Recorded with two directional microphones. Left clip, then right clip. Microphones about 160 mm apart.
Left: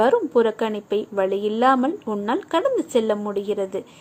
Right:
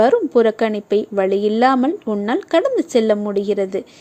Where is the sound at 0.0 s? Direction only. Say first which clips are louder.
Right 4 dB; 40° right (ahead or behind).